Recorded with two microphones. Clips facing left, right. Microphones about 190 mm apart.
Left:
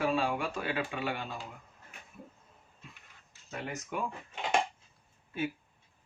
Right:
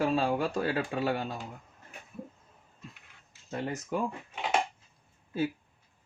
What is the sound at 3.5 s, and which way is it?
Speech, 35° right (ahead or behind).